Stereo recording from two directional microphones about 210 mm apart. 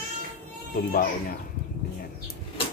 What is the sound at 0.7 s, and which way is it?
Speech, 40° left (ahead or behind).